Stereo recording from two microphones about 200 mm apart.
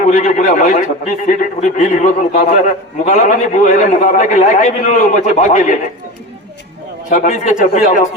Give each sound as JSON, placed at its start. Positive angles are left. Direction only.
{"t": 0.0, "sound": "a man's voice", "side_deg": 40}
{"t": 7.1, "sound": "a man's voice", "side_deg": 40}